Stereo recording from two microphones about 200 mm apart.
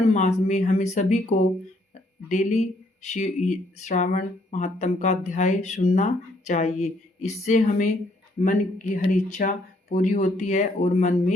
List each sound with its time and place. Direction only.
0.1 s speech: 35° left (ahead or behind)
2.3 s speech: 35° left (ahead or behind)